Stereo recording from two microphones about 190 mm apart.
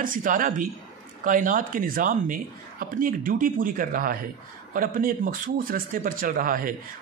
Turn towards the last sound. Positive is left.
turn(degrees=-50)  # may be behind; listen again after turning